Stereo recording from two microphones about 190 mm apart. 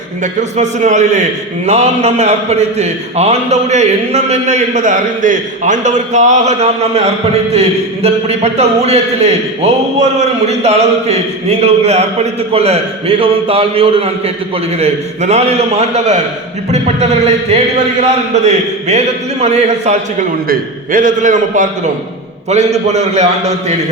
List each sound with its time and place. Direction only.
0.2 s a man's voice: 40° right (ahead or behind)